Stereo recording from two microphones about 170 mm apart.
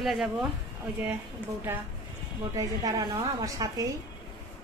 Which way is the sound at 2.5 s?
20° right (ahead or behind).